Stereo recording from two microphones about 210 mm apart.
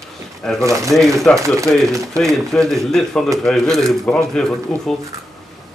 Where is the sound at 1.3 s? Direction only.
5° left (ahead or behind).